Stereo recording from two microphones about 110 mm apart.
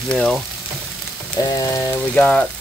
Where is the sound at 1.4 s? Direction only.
35° left (ahead or behind).